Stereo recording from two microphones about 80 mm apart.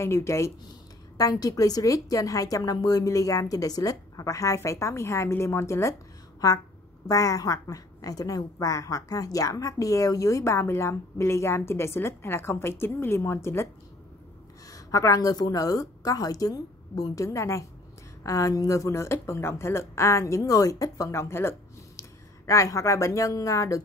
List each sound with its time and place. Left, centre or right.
0.0 s a woman's voice: left
1.1 s a woman's voice: left
7.1 s a woman's voice: left
14.7 s a woman's voice: left